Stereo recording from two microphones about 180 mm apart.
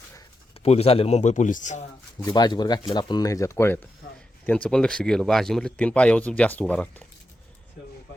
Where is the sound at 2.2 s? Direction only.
25° left (ahead or behind); by 7.1 s 5° left (ahead or behind).